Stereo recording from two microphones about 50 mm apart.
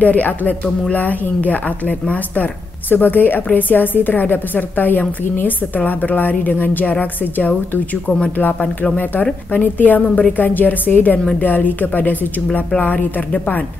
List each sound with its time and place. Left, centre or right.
0.0 s a woman's voice: left